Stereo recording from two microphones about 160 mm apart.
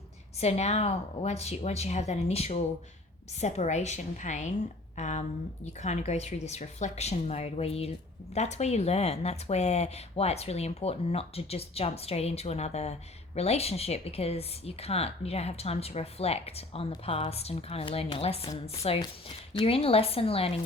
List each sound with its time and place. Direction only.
0.3 s a woman's voice: 45° left (ahead or behind)